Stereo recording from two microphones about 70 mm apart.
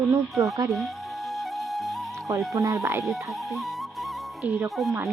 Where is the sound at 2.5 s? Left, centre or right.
Right.